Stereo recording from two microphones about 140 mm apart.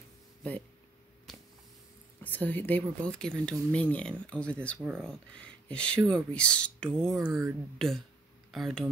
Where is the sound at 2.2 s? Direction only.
10° left (ahead or behind).